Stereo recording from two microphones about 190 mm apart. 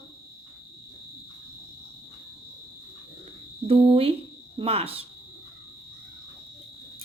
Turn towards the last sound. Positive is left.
turn(degrees=-30)  # may be behind; listen again after turning